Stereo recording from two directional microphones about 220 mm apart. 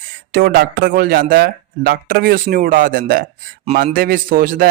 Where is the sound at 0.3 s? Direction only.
45° right (ahead or behind).